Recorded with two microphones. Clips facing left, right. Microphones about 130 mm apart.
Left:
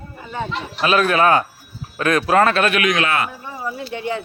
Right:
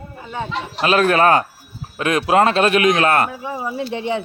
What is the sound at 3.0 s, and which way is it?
Speech, 45° right (ahead or behind).